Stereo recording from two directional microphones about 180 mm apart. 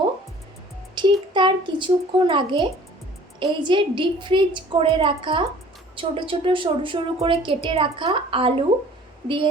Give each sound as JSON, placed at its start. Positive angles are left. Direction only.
{"t": 1.0, "sound": "music", "side_deg": -25}
{"t": 1.3, "sound": "a woman's voice", "side_deg": -25}